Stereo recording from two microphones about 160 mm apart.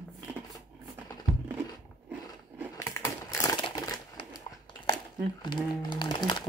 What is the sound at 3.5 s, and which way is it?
Crumpling, 25° left (ahead or behind).